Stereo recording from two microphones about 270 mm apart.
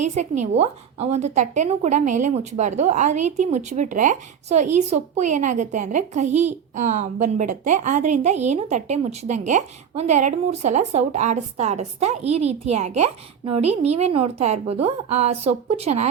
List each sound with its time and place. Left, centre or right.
0.1 s a woman's voice: right